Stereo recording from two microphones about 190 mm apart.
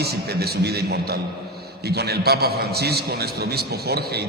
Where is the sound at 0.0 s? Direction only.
55° right (ahead or behind).